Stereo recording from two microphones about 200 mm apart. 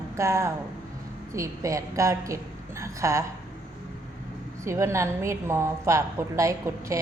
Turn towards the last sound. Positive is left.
turn(degrees=-15)  # may be behind; listen again after turning